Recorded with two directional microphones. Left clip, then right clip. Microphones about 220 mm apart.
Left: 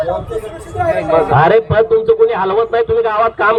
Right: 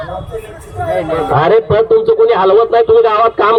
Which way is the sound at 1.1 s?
20° left (ahead or behind).